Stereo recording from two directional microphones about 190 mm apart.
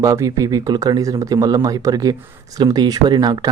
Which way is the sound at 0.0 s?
15° right (ahead or behind).